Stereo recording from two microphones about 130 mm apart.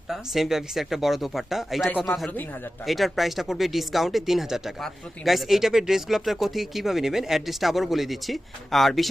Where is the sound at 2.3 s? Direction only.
15° left (ahead or behind).